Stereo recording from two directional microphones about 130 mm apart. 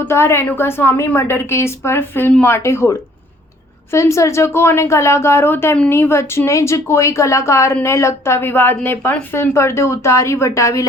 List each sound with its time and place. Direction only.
0.0 s speech: 20° left (ahead or behind)
3.9 s speech: 20° left (ahead or behind)